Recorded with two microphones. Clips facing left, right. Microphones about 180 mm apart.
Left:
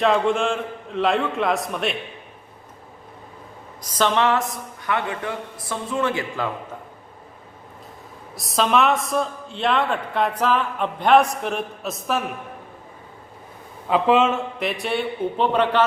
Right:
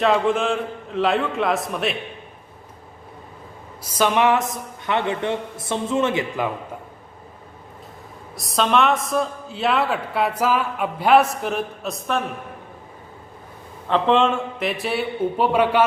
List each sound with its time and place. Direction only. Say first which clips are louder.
0.0 s a man's voice: even; centre (ahead or behind)
3.8 s a man's voice: right 2 dB; 10° right (ahead or behind)
8.4 s a man's voice: even; centre (ahead or behind)
13.8 s a man's voice: even; 5° left (ahead or behind); by 15.9 s 10° right (ahead or behind)